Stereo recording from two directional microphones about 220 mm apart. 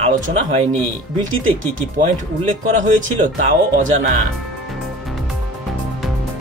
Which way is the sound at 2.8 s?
35° right (ahead or behind).